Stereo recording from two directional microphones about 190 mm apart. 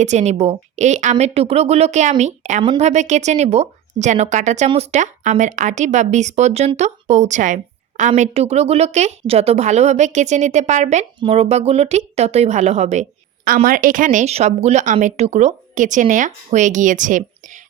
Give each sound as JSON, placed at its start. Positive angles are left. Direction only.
{"t": 0.0, "sound": "speech", "side_deg": -35}